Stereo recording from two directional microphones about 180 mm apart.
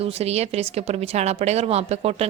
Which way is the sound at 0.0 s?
35° right (ahead or behind).